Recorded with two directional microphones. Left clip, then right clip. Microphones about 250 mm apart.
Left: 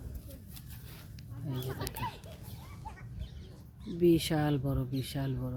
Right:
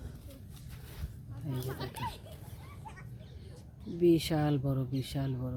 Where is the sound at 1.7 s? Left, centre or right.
Right.